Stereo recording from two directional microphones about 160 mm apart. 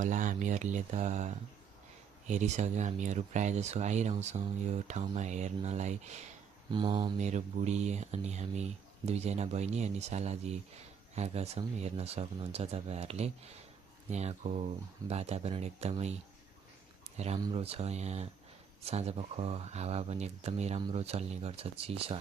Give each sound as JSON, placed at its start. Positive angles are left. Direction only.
{"t": 0.0, "sound": "speech", "side_deg": -50}
{"t": 6.7, "sound": "speech", "side_deg": -30}
{"t": 7.2, "sound": "speech", "side_deg": -45}
{"t": 17.2, "sound": "speech", "side_deg": -45}